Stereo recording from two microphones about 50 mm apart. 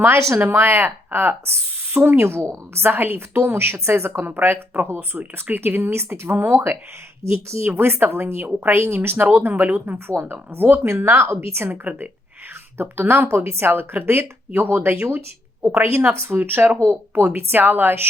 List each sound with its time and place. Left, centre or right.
0.3 s a woman's voice: right
2.7 s a woman's voice: right
4.3 s a woman's voice: right
7.2 s speech: right
7.7 s a woman's voice: right
8.7 s speech: right
9.0 s speech: right
10.5 s a woman's voice: right
10.8 s speech: right
11.3 s a woman's voice: right
11.7 s speech: right
12.7 s a woman's voice: right
15.8 s speech: right
16.4 s a woman's voice: right